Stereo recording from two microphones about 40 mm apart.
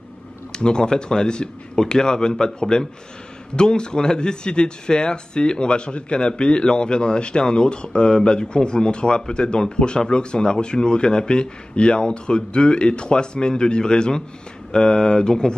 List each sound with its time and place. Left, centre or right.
0.5 s speech: left